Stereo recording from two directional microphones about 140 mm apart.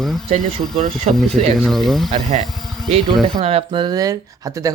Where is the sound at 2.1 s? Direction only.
50° right (ahead or behind).